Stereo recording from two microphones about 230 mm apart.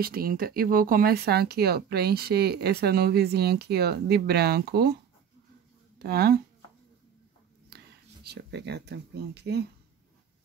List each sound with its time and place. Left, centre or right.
0.0 s speech: right
5.9 s speech: right
7.7 s speech: right